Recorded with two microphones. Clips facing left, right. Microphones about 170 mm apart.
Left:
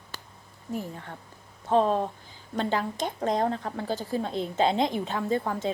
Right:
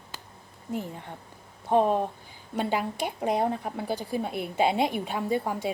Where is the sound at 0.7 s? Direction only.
20° right (ahead or behind).